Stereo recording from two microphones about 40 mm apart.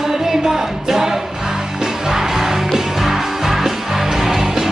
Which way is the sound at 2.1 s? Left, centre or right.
Centre.